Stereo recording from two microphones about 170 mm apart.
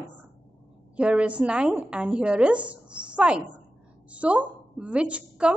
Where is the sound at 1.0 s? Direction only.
5° right (ahead or behind).